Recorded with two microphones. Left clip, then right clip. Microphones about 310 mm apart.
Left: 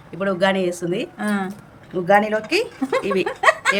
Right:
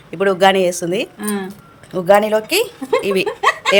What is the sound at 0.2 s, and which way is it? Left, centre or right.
A woman's voice, centre.